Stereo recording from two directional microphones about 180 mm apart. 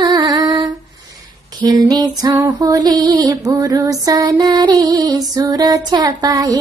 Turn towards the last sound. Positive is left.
turn(degrees=-20)  # may be behind; listen again after turning